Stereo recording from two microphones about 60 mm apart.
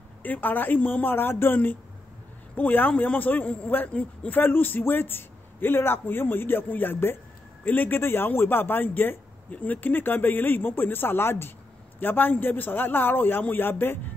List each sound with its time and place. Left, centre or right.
0.2 s a man's voice: left